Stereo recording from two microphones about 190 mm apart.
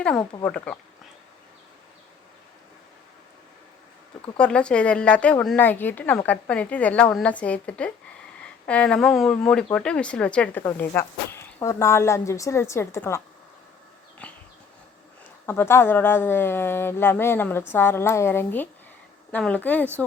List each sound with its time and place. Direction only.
0.0 s a woman's voice: 5° left (ahead or behind)
4.4 s a woman's voice: 5° left (ahead or behind)
14.2 s a sound: 5° left (ahead or behind)
15.4 s a woman's voice: 10° left (ahead or behind)